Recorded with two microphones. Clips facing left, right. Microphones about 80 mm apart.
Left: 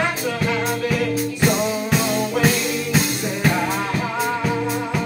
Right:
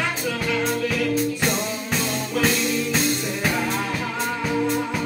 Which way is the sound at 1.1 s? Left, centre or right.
Centre.